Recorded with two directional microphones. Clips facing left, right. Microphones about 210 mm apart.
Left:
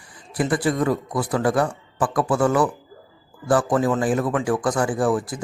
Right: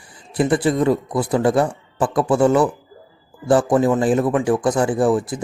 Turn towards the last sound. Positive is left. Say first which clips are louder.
# right 4 dB
turn(degrees=-25)  # may be behind; listen again after turning